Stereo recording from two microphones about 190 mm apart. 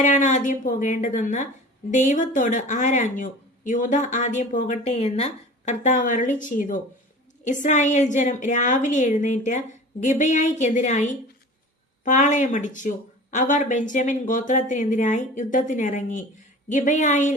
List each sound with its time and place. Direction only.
0.0 s speech: 40° left (ahead or behind)